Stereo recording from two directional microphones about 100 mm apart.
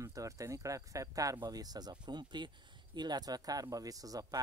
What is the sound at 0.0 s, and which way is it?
Speech, 35° right (ahead or behind).